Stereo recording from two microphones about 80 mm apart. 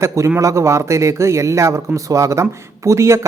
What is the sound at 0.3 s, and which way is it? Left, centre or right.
Speech, right.